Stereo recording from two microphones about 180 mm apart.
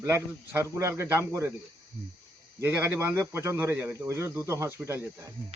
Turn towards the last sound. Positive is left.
turn(degrees=-15)  # may be behind; listen again after turning